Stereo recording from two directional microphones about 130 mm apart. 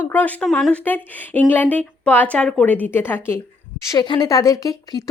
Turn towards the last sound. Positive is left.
turn(degrees=25)  # may be behind; listen again after turning